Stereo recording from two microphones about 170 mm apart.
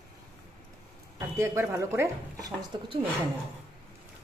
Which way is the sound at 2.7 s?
25° right (ahead or behind).